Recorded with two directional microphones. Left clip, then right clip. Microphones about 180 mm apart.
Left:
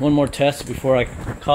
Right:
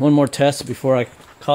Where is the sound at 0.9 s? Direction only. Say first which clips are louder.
Even; 20° right (ahead or behind).